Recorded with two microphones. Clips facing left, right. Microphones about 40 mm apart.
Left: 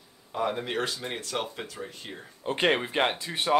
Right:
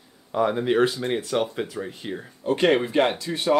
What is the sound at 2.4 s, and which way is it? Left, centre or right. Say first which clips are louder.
Speech: right 5 dB; left.